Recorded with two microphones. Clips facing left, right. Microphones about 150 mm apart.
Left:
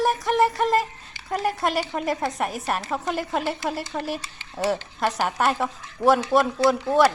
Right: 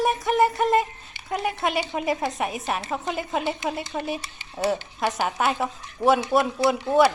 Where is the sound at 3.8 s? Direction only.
20° right (ahead or behind); by 6.5 s centre (ahead or behind).